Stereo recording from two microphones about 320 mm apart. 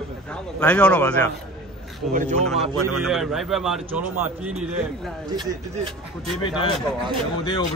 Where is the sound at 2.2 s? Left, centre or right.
Right.